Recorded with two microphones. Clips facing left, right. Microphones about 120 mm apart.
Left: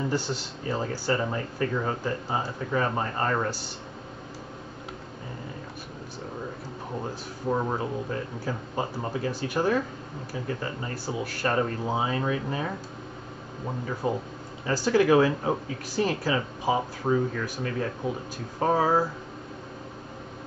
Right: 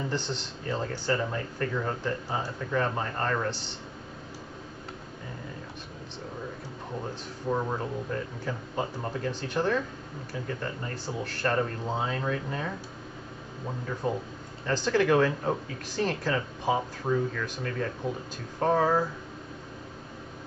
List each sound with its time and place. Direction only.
0.1 s speech: 10° left (ahead or behind)
7.4 s speech: 15° left (ahead or behind)
14.0 s speech: 5° left (ahead or behind)
17.0 s speech: 25° left (ahead or behind)
18.6 s speech: 10° left (ahead or behind)